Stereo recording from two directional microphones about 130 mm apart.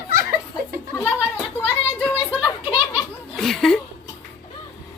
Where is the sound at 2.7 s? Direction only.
40° left (ahead or behind).